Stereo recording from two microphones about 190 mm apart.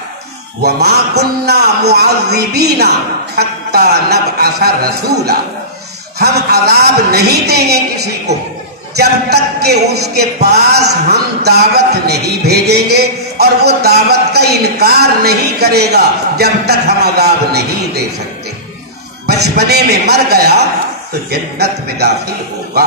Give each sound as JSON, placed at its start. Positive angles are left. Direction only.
{"t": 0.6, "sound": "a man's voice", "side_deg": -60}
{"t": 19.2, "sound": "a man's voice", "side_deg": -60}